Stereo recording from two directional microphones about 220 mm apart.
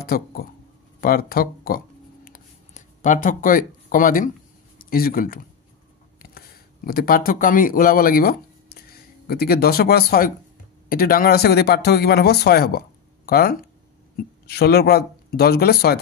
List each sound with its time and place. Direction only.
0.0 s speech: 40° left (ahead or behind)
2.2 s a sound: 35° left (ahead or behind)
4.7 s speech: 40° left (ahead or behind)